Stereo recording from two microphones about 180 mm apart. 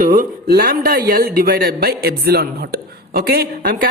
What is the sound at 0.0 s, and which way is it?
A man's voice, 50° right (ahead or behind).